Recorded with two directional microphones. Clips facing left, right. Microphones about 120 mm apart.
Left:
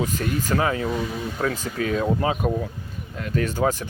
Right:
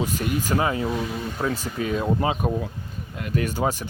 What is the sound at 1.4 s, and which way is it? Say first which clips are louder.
Speech: left 1 dB; 10° right (ahead or behind).